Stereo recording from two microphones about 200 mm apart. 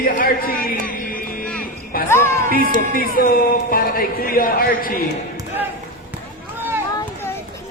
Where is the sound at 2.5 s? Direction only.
45° right (ahead or behind).